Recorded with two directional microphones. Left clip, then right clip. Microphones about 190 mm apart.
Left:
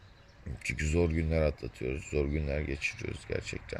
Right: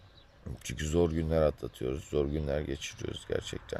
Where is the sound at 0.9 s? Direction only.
10° right (ahead or behind).